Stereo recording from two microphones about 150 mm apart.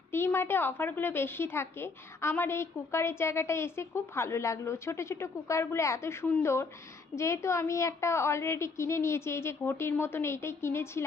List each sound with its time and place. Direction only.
0.1 s a woman's voice: 15° left (ahead or behind)